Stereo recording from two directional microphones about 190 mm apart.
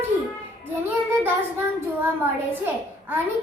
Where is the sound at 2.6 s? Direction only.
10° right (ahead or behind).